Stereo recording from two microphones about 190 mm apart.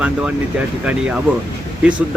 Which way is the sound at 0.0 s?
5° right (ahead or behind).